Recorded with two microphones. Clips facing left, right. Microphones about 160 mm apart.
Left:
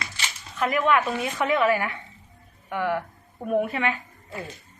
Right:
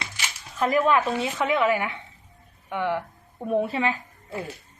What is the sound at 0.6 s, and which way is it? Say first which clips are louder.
Speech: right 1 dB; 35° right (ahead or behind).